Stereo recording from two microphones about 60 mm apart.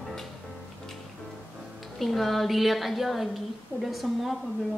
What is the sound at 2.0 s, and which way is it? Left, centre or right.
A woman's voice, centre.